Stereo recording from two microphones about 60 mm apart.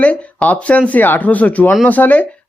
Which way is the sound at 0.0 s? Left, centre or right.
Left.